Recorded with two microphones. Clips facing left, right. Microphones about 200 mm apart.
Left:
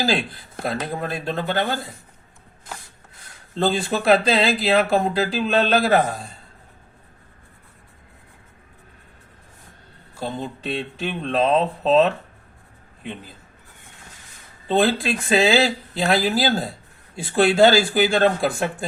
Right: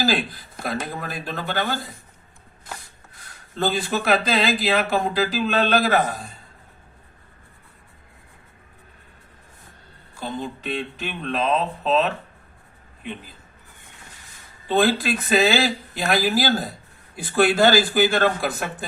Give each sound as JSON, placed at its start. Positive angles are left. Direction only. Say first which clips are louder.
{"t": 0.6, "sound": "speech", "louder": "left 2 dB", "side_deg": 25}
{"t": 3.5, "sound": "speech", "louder": "left 2 dB", "side_deg": 30}
{"t": 10.6, "sound": "speech", "louder": "left 2 dB", "side_deg": 30}
{"t": 14.7, "sound": "speech", "louder": "even", "side_deg": 25}